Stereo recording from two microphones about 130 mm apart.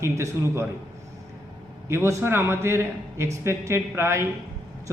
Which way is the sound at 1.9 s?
20° right (ahead or behind).